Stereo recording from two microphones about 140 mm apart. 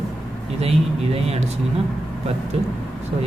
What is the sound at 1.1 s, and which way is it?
Speech, 45° right (ahead or behind).